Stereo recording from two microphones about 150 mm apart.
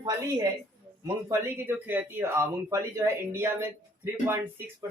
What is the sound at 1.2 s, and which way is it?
Speech, 15° right (ahead or behind).